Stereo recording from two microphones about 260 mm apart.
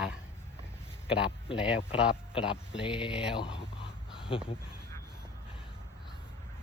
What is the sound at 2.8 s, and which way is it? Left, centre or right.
Speech, centre.